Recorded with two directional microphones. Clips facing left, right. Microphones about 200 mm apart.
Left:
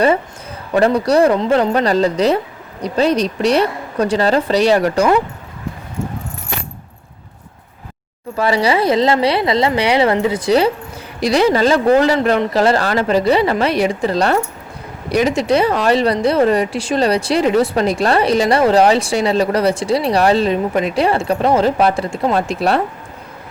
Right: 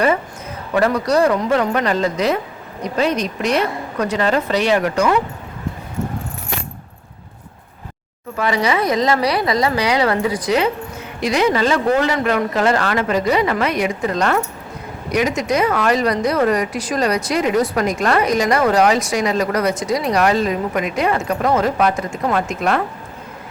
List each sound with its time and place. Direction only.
0.7 s speech: 30° left (ahead or behind)
8.4 s speech: 30° left (ahead or behind)